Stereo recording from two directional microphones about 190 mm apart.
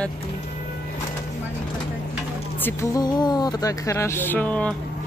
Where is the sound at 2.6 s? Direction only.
15° left (ahead or behind).